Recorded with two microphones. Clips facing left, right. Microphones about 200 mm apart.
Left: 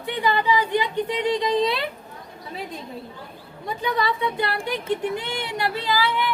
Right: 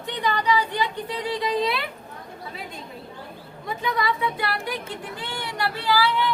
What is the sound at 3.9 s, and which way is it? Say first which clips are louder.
Speech: left 2 dB; 30° left (ahead or behind).